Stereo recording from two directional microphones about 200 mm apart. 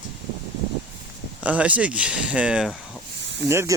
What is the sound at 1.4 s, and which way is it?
Speech, 5° right (ahead or behind).